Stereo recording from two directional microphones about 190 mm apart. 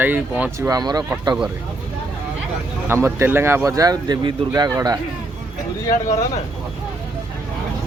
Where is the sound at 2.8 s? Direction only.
15° right (ahead or behind).